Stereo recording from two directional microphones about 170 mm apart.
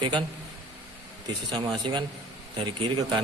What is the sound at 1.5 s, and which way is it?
A man's voice, 25° right (ahead or behind).